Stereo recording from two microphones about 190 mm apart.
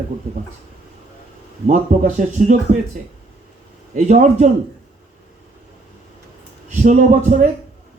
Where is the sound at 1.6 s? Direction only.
45° right (ahead or behind).